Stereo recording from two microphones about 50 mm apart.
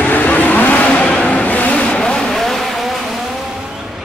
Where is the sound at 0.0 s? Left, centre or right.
Left.